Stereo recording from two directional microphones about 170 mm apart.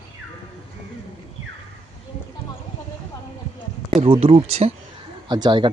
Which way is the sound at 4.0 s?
35° right (ahead or behind).